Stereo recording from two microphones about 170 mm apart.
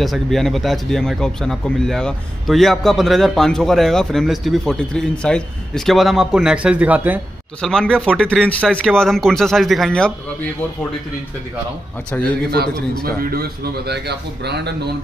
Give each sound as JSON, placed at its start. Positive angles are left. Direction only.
{"t": 0.0, "sound": "speech", "side_deg": 0}
{"t": 7.6, "sound": "speech", "side_deg": 5}
{"t": 12.1, "sound": "a man's voice", "side_deg": 10}
{"t": 13.0, "sound": "a man's voice", "side_deg": -60}